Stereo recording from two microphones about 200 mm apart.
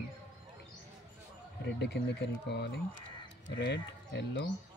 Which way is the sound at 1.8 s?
60° left (ahead or behind).